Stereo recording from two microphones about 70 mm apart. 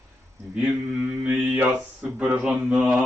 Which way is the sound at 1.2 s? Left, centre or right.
Right.